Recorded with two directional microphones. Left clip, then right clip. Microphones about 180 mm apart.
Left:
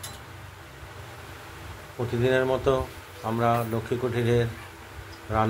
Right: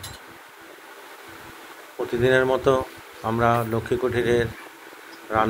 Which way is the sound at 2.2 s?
15° right (ahead or behind).